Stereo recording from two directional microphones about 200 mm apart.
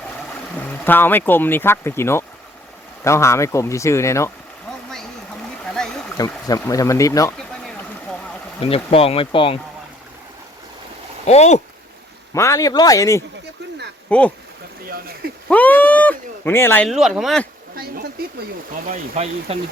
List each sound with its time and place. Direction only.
0.5 s speech: 10° left (ahead or behind)
5.8 s a sound: 5° left (ahead or behind)
6.1 s speech: 15° left (ahead or behind)
8.6 s speech: 30° left (ahead or behind)
11.3 s speech: 35° left (ahead or behind)
12.3 s speech: 15° left (ahead or behind)
14.8 s speech: 50° right (ahead or behind)
15.4 s speech: 10° left (ahead or behind)
16.9 s speech: centre (ahead or behind)
18.9 s speech: 35° right (ahead or behind)